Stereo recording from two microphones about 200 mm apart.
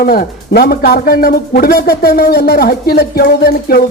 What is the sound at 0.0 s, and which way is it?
Speech, 50° left (ahead or behind).